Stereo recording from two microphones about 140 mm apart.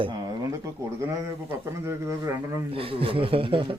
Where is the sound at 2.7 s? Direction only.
40° right (ahead or behind).